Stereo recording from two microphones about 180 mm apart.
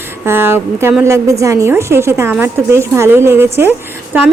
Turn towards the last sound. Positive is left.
turn(degrees=-10)  # may be behind; listen again after turning